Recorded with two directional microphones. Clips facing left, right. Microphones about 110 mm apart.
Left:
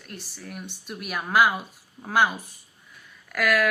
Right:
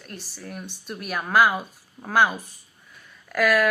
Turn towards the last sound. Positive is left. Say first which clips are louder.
# right 3 dB
turn(degrees=-40)  # may be behind; listen again after turning